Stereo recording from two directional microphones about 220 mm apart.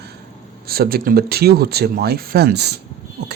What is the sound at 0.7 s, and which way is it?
A man's voice, 45° right (ahead or behind).